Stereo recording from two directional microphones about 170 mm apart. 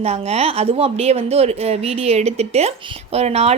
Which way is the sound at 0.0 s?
40° right (ahead or behind).